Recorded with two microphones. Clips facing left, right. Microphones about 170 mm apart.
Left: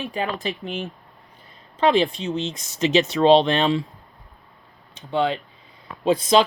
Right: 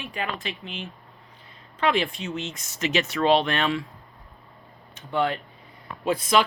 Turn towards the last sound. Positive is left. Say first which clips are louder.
# left 5 dB
turn(degrees=25)  # may be behind; listen again after turning